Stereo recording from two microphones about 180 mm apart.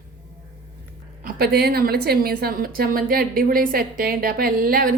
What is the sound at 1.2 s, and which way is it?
A woman's voice, 60° right (ahead or behind).